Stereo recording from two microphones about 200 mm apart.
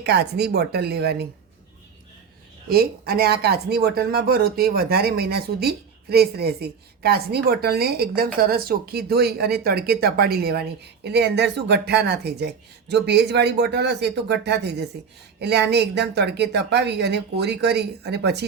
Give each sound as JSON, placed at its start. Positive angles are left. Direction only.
{"t": 0.0, "sound": "speech", "side_deg": -55}
{"t": 2.6, "sound": "speech", "side_deg": -50}